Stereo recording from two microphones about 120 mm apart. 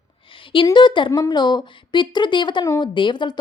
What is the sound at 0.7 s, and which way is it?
Speech, 40° left (ahead or behind).